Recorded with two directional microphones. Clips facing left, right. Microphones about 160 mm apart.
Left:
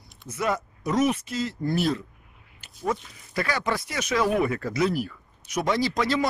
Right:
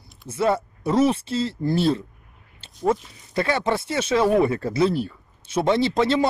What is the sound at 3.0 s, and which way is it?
Speech, 25° right (ahead or behind).